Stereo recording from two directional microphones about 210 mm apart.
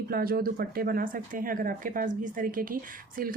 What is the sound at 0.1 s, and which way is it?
Speech, 45° right (ahead or behind).